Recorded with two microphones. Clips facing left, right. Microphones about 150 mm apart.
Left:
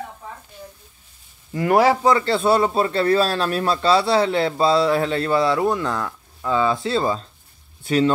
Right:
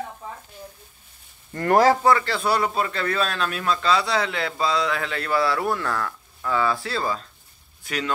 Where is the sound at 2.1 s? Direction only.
25° left (ahead or behind).